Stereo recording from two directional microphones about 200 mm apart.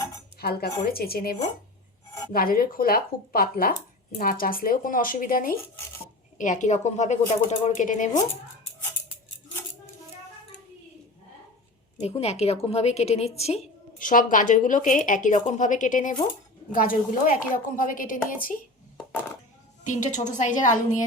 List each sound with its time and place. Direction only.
0.3 s a woman's voice: 50° left (ahead or behind)
11.9 s a woman's voice: 30° left (ahead or behind)
19.8 s a woman's voice: 40° left (ahead or behind)